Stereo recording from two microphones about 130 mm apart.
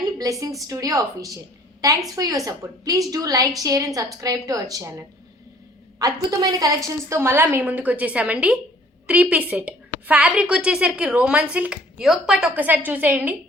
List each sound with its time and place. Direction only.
0.2 s a woman's voice: 25° right (ahead or behind)